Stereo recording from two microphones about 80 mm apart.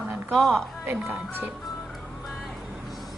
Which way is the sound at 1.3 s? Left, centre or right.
Right.